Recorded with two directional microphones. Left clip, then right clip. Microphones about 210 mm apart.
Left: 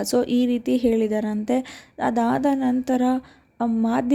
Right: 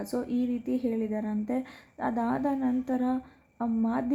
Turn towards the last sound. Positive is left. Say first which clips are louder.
# left 7 dB
turn(degrees=25)  # may be behind; listen again after turning